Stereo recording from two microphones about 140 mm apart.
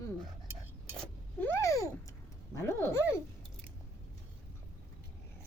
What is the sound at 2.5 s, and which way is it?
Speech, 20° left (ahead or behind).